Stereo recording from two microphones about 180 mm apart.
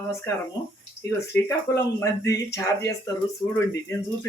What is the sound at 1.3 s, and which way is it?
Speech, 15° left (ahead or behind).